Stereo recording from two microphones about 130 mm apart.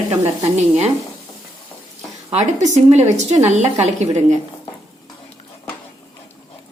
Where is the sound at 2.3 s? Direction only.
60° right (ahead or behind).